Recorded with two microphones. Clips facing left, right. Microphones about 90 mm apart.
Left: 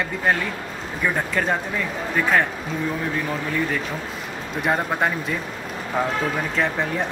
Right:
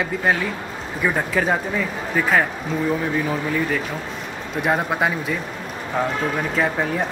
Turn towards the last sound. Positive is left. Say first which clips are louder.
# right 2 dB
turn(degrees=-5)  # may be behind; listen again after turning